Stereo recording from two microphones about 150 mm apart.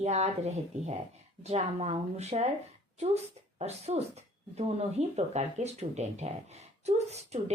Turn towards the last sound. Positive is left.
turn(degrees=-45)  # may be behind; listen again after turning